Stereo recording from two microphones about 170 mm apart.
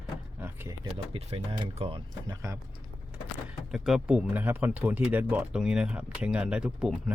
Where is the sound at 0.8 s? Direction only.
35° right (ahead or behind).